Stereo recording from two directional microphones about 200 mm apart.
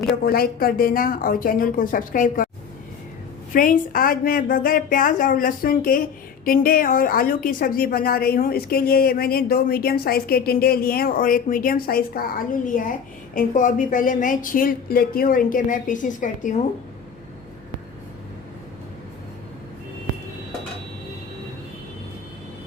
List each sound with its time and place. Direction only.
0.3 s speech: 50° left (ahead or behind)
3.5 s a woman's voice: 45° left (ahead or behind)